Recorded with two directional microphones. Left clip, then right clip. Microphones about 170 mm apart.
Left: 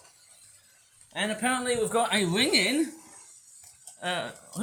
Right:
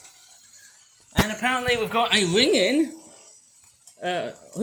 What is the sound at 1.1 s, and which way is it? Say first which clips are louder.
A man's voice: right 5 dB; 20° left (ahead or behind).